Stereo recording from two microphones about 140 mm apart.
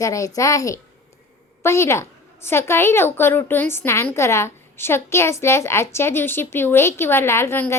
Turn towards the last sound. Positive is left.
turn(degrees=15)  # may be behind; listen again after turning